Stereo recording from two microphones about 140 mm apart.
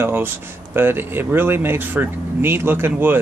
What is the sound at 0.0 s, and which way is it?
Speech, 15° right (ahead or behind).